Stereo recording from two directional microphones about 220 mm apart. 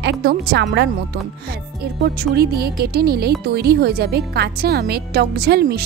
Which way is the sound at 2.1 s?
45° right (ahead or behind).